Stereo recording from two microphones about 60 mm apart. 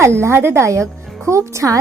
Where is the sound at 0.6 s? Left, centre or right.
Right.